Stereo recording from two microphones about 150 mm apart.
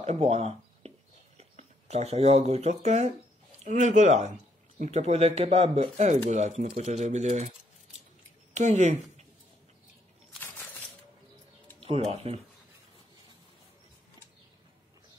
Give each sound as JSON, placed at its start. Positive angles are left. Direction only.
{"t": 0.0, "sound": "a sound", "side_deg": -45}
{"t": 1.4, "sound": "speech", "side_deg": -45}
{"t": 8.5, "sound": "speech", "side_deg": -50}
{"t": 11.8, "sound": "speech", "side_deg": -45}